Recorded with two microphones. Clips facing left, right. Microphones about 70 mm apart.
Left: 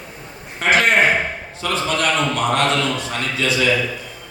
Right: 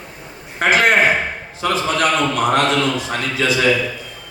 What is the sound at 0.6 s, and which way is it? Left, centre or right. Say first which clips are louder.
Speech: right 2 dB; right.